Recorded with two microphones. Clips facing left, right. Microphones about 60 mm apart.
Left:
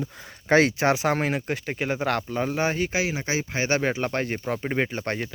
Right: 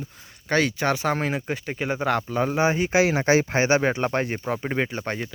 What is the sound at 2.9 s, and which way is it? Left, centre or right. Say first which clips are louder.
Speech: right 6 dB; right.